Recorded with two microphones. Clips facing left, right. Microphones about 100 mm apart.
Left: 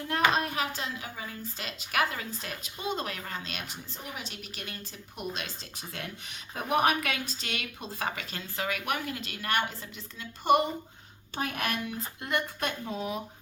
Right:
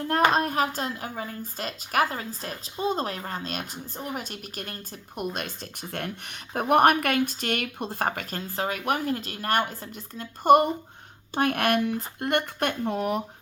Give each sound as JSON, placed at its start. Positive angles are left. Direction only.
{"t": 0.1, "sound": "a woman's voice", "side_deg": -45}
{"t": 11.3, "sound": "speech", "side_deg": -65}